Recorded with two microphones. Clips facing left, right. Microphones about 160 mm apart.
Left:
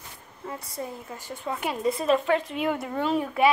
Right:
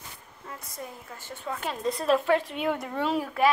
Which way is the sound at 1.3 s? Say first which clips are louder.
Left 3 dB; 15° left (ahead or behind).